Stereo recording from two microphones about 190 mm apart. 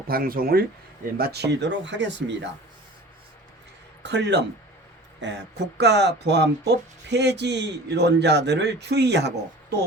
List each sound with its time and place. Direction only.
0.1 s speech: 50° right (ahead or behind); by 2.5 s 70° right (ahead or behind)
4.0 s speech: 65° right (ahead or behind)